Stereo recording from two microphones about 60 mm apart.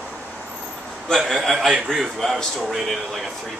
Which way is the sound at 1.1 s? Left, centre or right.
Centre.